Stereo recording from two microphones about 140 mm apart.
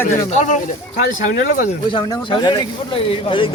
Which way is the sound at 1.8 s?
35° left (ahead or behind).